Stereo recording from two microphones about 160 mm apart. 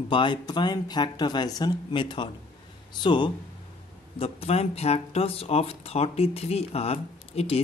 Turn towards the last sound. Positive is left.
turn(degrees=40)  # may be behind; listen again after turning